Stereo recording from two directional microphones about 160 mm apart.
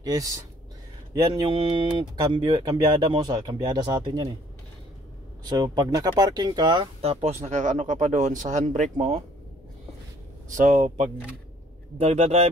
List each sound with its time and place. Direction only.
0.0 s speech: 25° right (ahead or behind)
5.4 s speech: 25° right (ahead or behind); by 8.8 s 50° right (ahead or behind)
8.9 s a man's voice: 35° right (ahead or behind)
10.5 s a man's voice: 50° right (ahead or behind)